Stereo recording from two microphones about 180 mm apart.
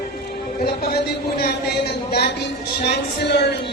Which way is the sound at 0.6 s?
60° left (ahead or behind).